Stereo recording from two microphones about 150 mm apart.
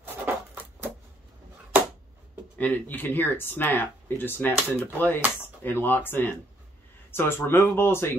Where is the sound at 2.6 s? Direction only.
10° left (ahead or behind).